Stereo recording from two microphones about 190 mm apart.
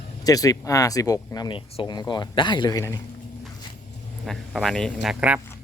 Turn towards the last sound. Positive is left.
turn(degrees=-5)  # may be behind; listen again after turning